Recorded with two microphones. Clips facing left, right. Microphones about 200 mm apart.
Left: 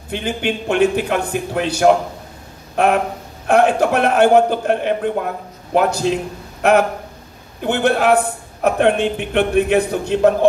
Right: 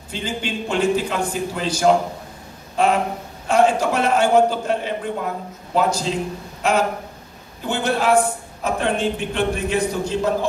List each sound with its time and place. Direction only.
0.1 s a woman's voice: 60° left (ahead or behind)